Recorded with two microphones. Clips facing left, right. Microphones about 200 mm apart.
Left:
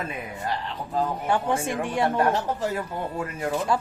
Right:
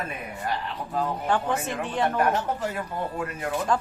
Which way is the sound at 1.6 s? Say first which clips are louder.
Left 2 dB; 10° left (ahead or behind).